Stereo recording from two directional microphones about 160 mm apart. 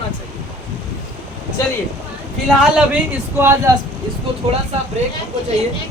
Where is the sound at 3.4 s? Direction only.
15° right (ahead or behind).